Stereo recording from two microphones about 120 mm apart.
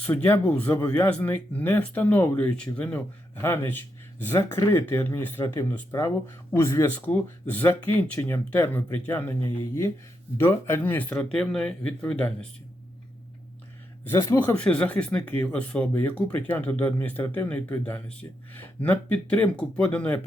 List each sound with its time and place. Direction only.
0.0 s speech: 15° left (ahead or behind)
14.4 s speech: 10° left (ahead or behind)